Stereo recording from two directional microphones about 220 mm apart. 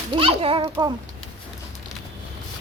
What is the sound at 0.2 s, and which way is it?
Speech, 25° right (ahead or behind).